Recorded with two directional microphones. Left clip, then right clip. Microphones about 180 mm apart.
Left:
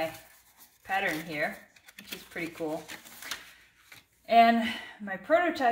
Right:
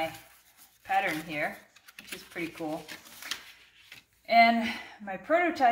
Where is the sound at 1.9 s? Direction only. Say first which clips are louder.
Even; 15° right (ahead or behind).